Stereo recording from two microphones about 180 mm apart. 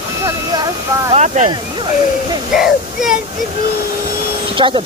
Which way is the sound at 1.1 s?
40° right (ahead or behind).